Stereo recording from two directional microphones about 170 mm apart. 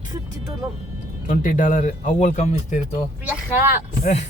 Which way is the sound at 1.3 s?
50° left (ahead or behind).